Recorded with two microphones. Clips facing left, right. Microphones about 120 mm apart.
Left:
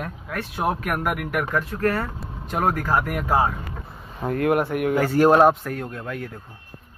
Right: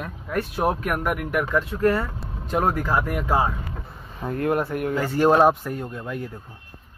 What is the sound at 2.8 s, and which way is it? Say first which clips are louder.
Speech: left 1 dB; 20° left (ahead or behind).